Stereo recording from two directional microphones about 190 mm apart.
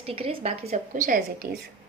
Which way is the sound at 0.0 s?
30° right (ahead or behind).